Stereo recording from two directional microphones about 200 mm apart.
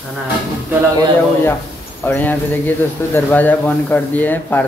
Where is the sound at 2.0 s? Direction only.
10° left (ahead or behind).